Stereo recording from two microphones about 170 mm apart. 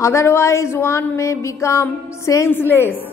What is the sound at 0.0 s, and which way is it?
Speech, 15° left (ahead or behind).